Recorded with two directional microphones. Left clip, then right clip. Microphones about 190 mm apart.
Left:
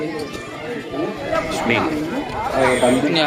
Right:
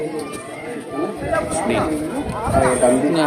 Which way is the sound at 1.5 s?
5° right (ahead or behind).